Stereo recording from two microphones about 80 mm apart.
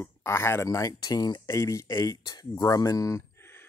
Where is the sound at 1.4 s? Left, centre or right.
Left.